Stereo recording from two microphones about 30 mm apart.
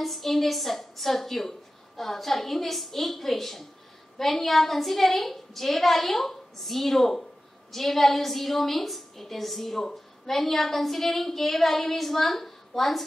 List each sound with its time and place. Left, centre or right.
0.0 s a woman's voice: centre